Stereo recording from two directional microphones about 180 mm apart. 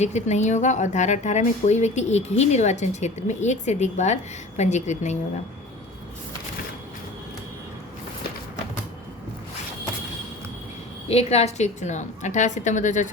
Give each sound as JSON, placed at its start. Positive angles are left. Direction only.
{"t": 0.0, "sound": "a woman's voice", "side_deg": 40}
{"t": 11.1, "sound": "a woman's voice", "side_deg": 35}